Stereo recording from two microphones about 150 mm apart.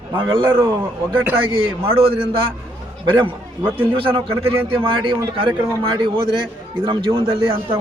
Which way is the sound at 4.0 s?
35° right (ahead or behind).